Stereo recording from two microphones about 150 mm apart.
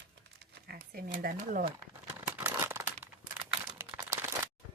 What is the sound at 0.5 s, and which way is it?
Speech, 90° right.